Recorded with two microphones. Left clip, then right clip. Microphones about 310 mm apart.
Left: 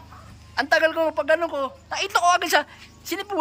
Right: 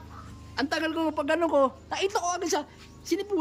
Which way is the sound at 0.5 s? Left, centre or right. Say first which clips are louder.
Left 9 dB; centre.